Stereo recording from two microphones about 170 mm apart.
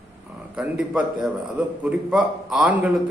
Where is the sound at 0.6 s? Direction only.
5° right (ahead or behind).